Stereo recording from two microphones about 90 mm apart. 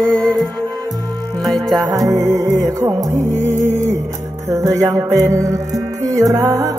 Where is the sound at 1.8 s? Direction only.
40° right (ahead or behind).